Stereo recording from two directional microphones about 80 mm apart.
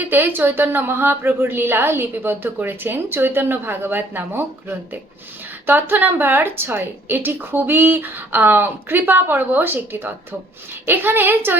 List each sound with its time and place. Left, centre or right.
0.0 s a woman's voice: right
5.6 s a woman's voice: right